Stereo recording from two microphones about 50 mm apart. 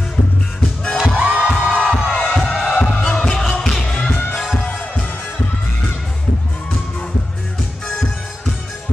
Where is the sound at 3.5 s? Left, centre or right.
Centre.